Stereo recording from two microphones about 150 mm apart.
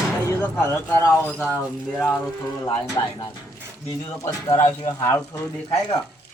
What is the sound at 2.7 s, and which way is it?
Speech, 30° left (ahead or behind).